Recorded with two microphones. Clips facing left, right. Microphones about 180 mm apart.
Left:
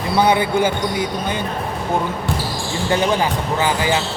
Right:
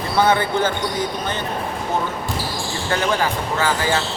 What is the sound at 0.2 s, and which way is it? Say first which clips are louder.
Speech: left 1 dB; 15° left (ahead or behind).